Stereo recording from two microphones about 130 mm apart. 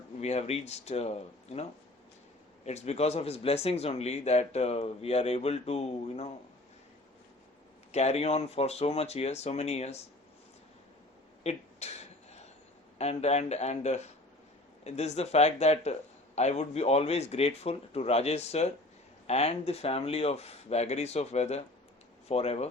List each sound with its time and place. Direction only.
0.2 s a man's voice: 55° left (ahead or behind)
2.6 s a man's voice: 55° left (ahead or behind)
7.9 s speech: 55° left (ahead or behind)
11.4 s a sound: 55° left (ahead or behind)
13.0 s a man's voice: 55° left (ahead or behind)